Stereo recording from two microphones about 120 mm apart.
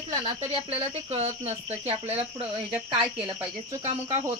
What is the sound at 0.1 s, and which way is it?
Speech, 50° right (ahead or behind).